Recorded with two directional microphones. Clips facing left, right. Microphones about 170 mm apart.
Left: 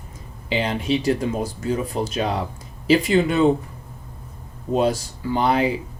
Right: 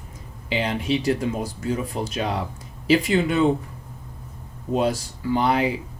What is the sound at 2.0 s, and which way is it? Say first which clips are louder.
Speech: left 3 dB; 35° left (ahead or behind).